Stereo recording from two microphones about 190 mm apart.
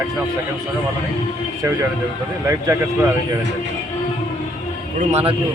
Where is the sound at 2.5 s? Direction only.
15° right (ahead or behind).